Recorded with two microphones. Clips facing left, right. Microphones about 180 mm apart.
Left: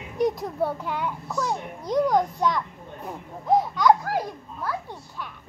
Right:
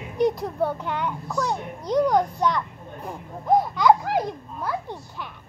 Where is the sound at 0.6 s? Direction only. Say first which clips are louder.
Right 1 dB; 5° left (ahead or behind).